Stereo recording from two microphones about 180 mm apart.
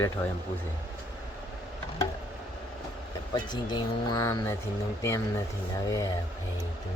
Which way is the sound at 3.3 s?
25° left (ahead or behind).